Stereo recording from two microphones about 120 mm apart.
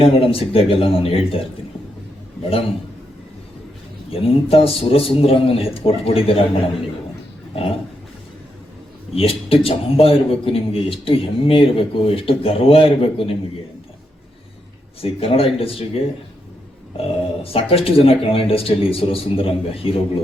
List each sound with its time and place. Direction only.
0.0 s a man's voice: 50° left (ahead or behind)
4.1 s a man's voice: 50° left (ahead or behind)
9.1 s a man's voice: 50° left (ahead or behind)
15.0 s a man's voice: 50° left (ahead or behind)